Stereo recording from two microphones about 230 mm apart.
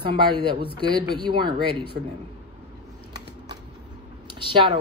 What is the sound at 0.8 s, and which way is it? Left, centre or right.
Speech, centre.